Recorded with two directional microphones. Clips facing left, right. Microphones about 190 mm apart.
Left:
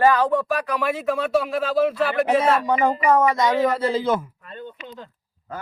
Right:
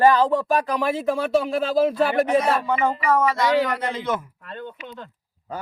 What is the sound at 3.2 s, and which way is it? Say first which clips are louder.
Speech: left 2 dB; 20° left (ahead or behind).